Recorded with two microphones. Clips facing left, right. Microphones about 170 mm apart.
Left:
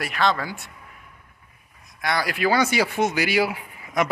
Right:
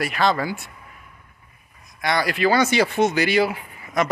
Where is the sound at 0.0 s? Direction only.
5° right (ahead or behind).